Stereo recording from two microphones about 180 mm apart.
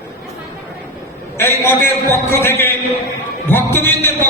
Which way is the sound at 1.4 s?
10° left (ahead or behind).